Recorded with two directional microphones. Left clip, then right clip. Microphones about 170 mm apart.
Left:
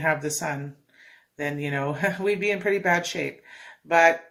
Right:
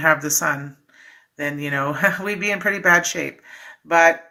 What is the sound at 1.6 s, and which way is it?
Speech, 10° left (ahead or behind).